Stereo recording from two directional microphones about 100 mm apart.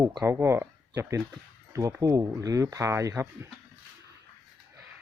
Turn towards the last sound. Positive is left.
turn(degrees=-25)  # may be behind; listen again after turning